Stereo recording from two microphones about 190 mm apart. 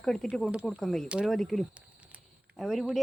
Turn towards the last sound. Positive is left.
turn(degrees=0)  # may be behind; listen again after turning